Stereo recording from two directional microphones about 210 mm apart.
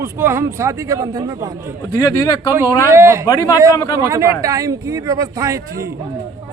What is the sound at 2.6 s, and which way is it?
A man's voice, 10° right (ahead or behind).